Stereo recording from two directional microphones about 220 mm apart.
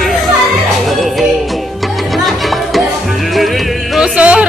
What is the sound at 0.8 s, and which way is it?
Music, centre (ahead or behind).